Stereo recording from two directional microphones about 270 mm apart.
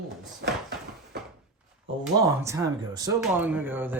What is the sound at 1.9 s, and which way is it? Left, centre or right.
Speech, right.